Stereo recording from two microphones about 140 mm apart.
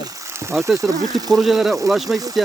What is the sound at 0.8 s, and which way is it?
Speech, 25° right (ahead or behind).